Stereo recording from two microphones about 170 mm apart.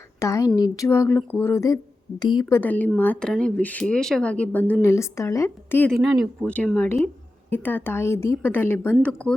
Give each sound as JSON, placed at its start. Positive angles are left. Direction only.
{"t": 0.2, "sound": "a woman's voice", "side_deg": 20}
{"t": 2.6, "sound": "speech", "side_deg": 10}
{"t": 5.9, "sound": "speech", "side_deg": 0}